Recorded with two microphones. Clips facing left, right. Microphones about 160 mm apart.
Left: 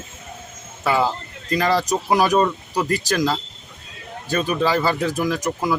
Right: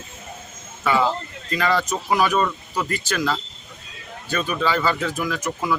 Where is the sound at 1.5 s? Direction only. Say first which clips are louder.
Left 3 dB; 35° left (ahead or behind).